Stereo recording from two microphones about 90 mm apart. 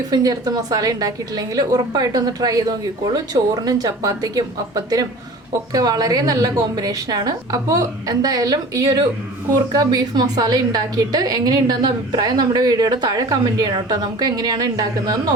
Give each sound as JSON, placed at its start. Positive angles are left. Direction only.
{"t": 0.1, "sound": "a woman's voice", "side_deg": -45}